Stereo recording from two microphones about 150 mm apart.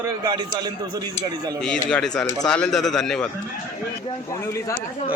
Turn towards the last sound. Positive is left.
turn(degrees=20)  # may be behind; listen again after turning